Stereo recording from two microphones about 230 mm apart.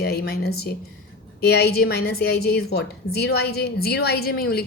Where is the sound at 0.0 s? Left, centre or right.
Left.